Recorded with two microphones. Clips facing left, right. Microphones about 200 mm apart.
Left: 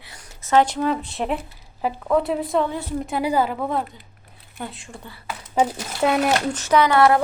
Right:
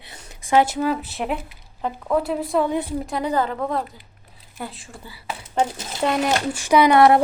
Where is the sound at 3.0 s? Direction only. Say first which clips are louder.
Left 1 dB; 5° left (ahead or behind).